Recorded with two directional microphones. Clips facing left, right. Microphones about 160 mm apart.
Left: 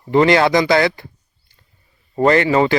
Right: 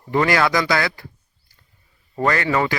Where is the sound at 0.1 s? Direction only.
25° left (ahead or behind).